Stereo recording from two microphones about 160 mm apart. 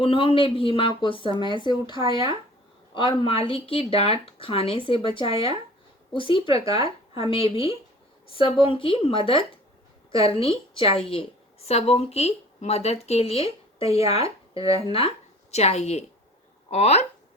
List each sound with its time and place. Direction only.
0.0 s speech: 35° left (ahead or behind)
14.6 s speech: 20° right (ahead or behind)
14.8 s speech: 35° left (ahead or behind)